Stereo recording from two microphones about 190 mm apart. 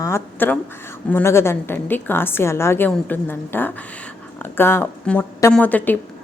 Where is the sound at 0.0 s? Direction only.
10° left (ahead or behind).